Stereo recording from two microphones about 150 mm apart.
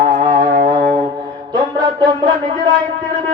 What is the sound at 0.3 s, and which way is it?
Music, 60° right (ahead or behind).